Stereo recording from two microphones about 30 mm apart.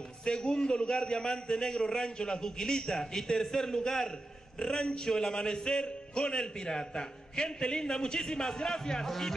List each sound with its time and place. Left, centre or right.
0.2 s a man's voice: left; by 9.3 s centre